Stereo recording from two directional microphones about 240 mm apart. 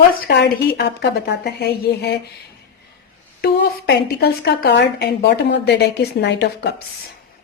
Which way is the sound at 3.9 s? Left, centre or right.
Left.